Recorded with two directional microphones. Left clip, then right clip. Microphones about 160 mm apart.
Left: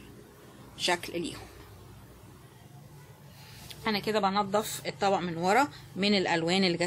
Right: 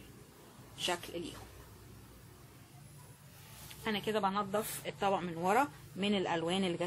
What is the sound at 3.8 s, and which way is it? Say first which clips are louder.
A woman's voice: left 6 dB; 30° left (ahead or behind).